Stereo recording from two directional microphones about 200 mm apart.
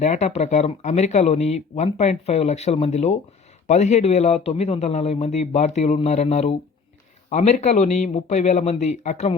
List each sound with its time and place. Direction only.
0.0 s speech: 35° left (ahead or behind)